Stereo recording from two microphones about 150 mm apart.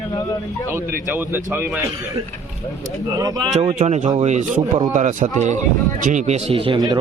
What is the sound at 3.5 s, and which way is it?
Speech, 45° right (ahead or behind).